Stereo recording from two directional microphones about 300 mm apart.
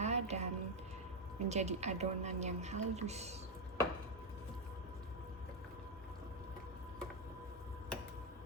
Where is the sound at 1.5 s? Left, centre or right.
Right.